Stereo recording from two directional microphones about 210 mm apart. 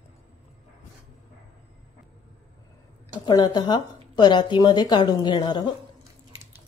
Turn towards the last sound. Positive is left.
turn(degrees=20)  # may be behind; listen again after turning